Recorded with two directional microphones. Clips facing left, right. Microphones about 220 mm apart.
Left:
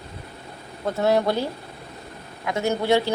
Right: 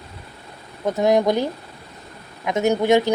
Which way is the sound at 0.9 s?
15° right (ahead or behind).